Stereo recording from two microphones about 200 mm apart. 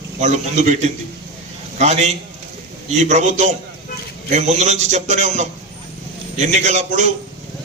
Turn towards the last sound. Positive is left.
turn(degrees=-35)  # may be behind; listen again after turning